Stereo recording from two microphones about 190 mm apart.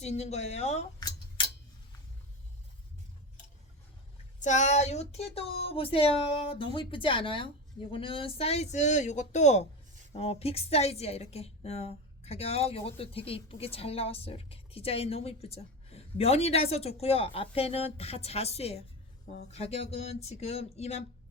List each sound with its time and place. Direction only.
0.0 s a woman's voice: 35° left (ahead or behind)
4.4 s a woman's voice: 40° left (ahead or behind)